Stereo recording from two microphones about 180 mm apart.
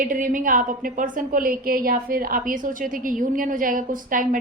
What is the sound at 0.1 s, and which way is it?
A woman's voice, 50° right (ahead or behind).